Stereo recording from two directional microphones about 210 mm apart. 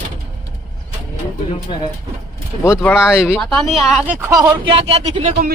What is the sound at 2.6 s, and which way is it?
A man's voice, 10° left (ahead or behind).